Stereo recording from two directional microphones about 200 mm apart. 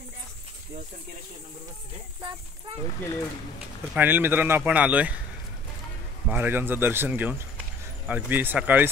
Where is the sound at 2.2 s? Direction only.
25° right (ahead or behind).